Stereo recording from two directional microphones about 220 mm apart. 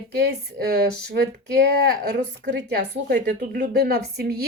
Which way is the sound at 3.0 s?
45° right (ahead or behind).